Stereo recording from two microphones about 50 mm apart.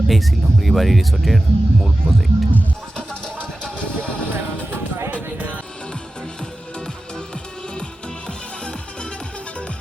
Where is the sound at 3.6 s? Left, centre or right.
Left.